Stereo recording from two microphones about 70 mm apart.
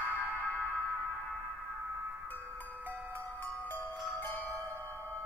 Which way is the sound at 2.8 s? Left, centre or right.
Right.